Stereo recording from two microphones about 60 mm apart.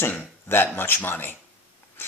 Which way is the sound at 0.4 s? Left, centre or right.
Left.